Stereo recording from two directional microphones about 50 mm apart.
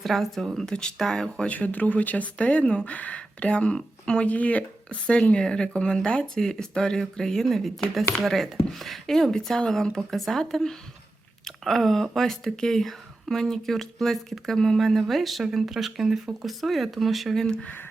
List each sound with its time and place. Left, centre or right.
0.0 s speech: centre
1.5 s speech: left
4.3 s speech: left
5.4 s speech: centre
17.4 s speech: centre